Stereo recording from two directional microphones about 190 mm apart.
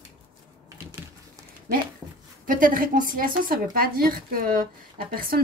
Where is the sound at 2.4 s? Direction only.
45° right (ahead or behind).